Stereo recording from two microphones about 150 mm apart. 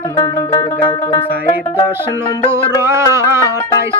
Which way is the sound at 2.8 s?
20° right (ahead or behind).